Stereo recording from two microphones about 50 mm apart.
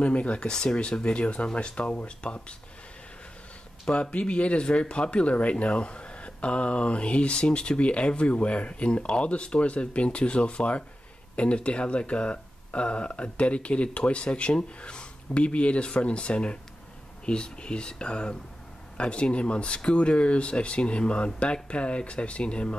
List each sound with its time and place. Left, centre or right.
0.0 s speech: left
0.5 s speech: centre
3.8 s speech: left